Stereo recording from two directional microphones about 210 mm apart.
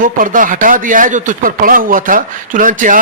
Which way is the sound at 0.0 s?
40° right (ahead or behind).